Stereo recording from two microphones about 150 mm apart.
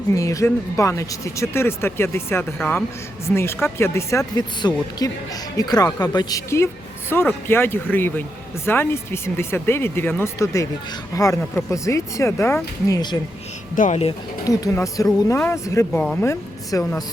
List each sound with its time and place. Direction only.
0.1 s speech: 20° left (ahead or behind)
13.7 s speech: 60° left (ahead or behind)
14.4 s speech: 25° left (ahead or behind)
15.9 s speech: 5° left (ahead or behind)
16.2 s speech: 20° left (ahead or behind)